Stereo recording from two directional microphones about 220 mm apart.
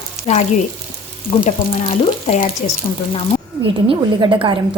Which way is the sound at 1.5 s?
35° left (ahead or behind).